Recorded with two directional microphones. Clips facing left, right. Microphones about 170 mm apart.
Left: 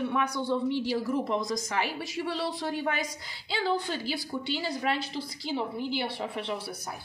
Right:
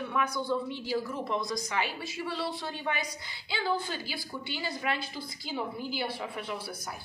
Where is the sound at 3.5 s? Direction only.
30° left (ahead or behind).